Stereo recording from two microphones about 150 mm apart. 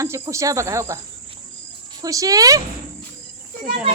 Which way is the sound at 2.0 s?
25° right (ahead or behind).